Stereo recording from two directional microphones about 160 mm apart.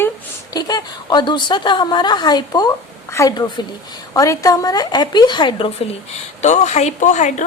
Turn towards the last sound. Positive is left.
turn(degrees=50)  # may be behind; listen again after turning